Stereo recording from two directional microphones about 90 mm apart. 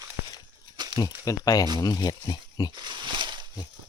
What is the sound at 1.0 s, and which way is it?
Speech, 40° left (ahead or behind).